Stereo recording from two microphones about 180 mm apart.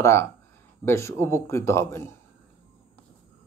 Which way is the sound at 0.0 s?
15° left (ahead or behind).